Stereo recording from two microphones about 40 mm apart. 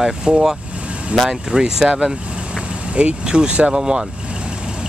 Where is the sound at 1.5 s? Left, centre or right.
Centre.